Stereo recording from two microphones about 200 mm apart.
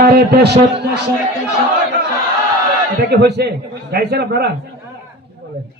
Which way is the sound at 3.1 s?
55° right (ahead or behind).